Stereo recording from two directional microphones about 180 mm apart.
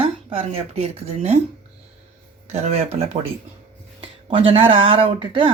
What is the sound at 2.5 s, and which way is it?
Speech, 40° right (ahead or behind).